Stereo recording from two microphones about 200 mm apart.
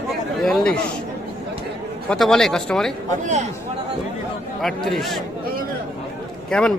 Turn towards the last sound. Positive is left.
turn(degrees=5)  # may be behind; listen again after turning